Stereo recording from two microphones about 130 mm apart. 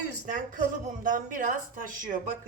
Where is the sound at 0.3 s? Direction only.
75° right (ahead or behind); by 2.1 s 90° right.